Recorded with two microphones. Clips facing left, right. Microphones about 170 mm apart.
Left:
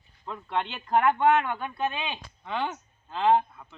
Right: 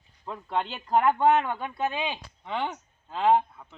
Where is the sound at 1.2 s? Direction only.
35° right (ahead or behind).